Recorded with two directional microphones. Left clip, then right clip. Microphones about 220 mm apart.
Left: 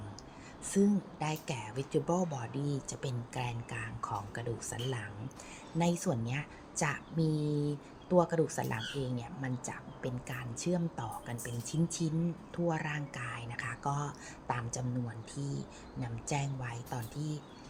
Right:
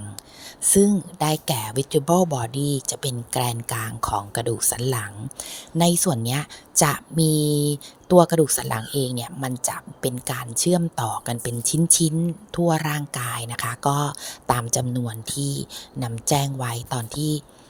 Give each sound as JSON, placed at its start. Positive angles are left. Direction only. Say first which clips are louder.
{"t": 0.6, "sound": "speech", "louder": "right 13 dB", "side_deg": -40}